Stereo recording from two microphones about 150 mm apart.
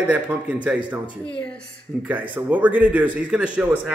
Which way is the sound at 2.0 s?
10° right (ahead or behind).